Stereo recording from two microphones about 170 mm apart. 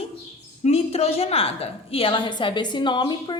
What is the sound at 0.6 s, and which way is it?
A woman's voice, 35° left (ahead or behind).